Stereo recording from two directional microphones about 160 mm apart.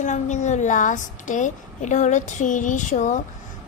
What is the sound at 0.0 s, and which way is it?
A woman's voice, 50° left (ahead or behind).